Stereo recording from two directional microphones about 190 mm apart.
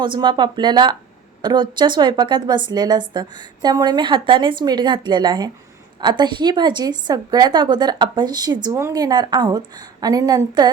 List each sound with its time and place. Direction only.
0.0 s a woman's voice: 25° right (ahead or behind)